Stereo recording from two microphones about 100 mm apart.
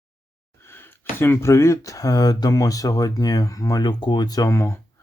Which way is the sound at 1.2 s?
25° left (ahead or behind).